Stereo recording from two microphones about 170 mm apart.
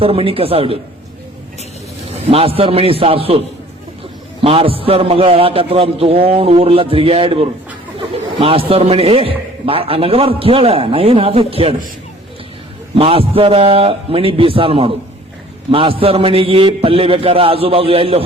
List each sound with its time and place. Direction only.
0.0 s a man's voice: 35° right (ahead or behind)
2.3 s a man's voice: 35° right (ahead or behind)
4.4 s a man's voice: 35° right (ahead or behind)
13.0 s a man's voice: 35° right (ahead or behind)